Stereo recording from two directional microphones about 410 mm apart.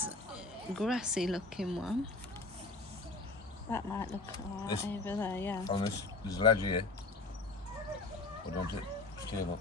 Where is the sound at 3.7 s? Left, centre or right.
Centre.